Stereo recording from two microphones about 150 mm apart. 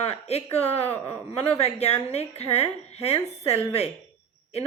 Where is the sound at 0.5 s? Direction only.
45° left (ahead or behind).